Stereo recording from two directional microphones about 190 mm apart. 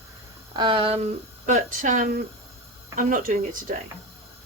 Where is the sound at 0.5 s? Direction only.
25° right (ahead or behind).